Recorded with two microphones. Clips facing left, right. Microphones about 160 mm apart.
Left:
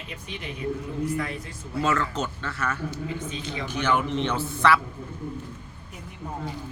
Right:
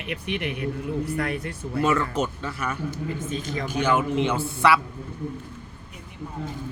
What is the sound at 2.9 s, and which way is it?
Speech, 45° right (ahead or behind).